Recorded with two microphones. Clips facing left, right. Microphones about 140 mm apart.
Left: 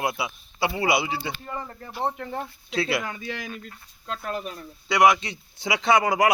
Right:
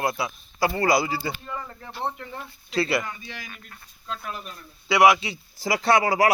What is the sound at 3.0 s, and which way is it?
Speech, 90° left.